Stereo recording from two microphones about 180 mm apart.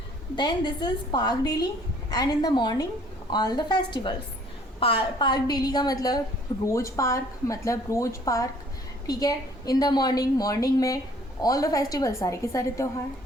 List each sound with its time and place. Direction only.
0.3 s a woman's voice: 25° left (ahead or behind)